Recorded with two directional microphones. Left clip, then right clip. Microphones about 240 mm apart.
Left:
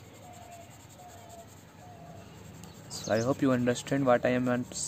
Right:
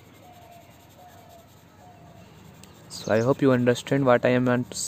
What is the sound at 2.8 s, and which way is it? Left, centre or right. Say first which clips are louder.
Speech: right 6 dB; right.